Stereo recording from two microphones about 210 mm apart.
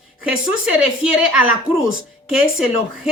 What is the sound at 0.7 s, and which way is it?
Speech, 5° right (ahead or behind).